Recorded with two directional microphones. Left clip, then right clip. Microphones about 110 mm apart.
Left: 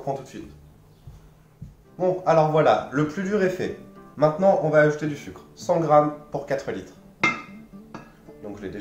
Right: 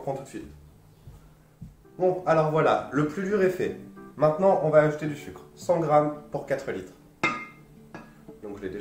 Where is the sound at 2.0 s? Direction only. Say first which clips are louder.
Left 3 dB; centre (ahead or behind).